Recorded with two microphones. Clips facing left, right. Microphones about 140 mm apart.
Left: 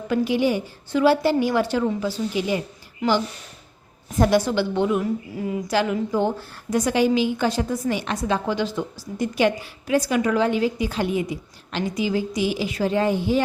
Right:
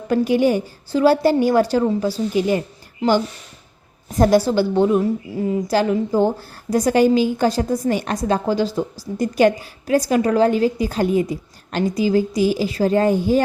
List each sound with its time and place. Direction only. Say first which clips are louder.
0.1 s a woman's voice: right 4 dB; 45° right (ahead or behind)
3.0 s a woman's voice: right 4 dB; 30° right (ahead or behind)
4.2 s a woman's voice: right 4 dB; 35° right (ahead or behind)